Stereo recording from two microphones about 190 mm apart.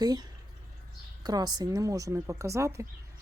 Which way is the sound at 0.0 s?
20° right (ahead or behind).